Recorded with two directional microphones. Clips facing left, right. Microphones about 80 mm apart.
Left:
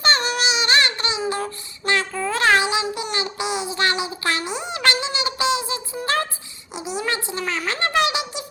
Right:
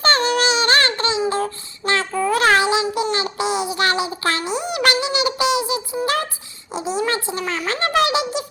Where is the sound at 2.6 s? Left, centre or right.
Right.